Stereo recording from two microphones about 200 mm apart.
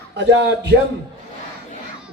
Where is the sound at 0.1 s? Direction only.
60° right (ahead or behind).